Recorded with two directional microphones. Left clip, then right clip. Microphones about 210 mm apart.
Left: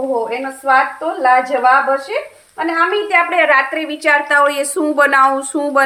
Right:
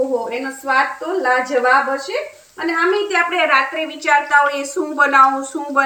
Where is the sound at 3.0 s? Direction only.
55° left (ahead or behind).